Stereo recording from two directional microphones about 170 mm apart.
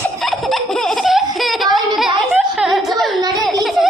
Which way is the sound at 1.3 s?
Centre (ahead or behind).